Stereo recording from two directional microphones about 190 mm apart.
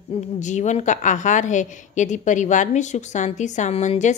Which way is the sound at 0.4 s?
40° left (ahead or behind).